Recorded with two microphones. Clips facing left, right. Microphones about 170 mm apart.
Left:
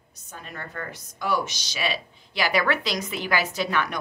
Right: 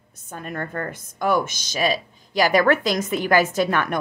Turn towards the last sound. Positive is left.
turn(degrees=-50)  # may be behind; listen again after turning